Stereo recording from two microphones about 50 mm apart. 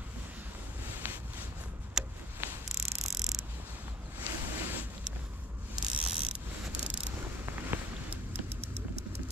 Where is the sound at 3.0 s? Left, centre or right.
Centre.